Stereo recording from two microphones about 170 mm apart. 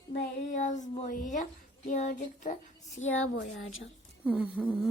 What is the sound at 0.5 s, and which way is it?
Child singing, 45° left (ahead or behind).